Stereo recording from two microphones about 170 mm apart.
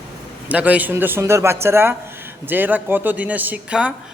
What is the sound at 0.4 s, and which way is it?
Speech, 10° right (ahead or behind).